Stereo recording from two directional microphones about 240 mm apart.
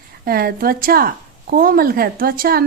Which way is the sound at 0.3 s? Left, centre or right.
Right.